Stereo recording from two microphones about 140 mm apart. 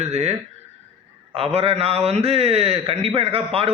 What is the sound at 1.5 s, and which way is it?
A man's voice, 45° right (ahead or behind).